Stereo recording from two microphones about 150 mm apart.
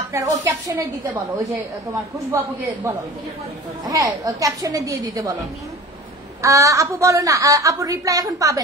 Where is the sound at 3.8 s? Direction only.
25° right (ahead or behind).